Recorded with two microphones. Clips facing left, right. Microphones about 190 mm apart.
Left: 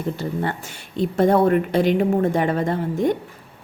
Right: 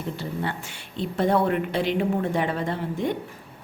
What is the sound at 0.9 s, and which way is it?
A woman's voice, 45° left (ahead or behind).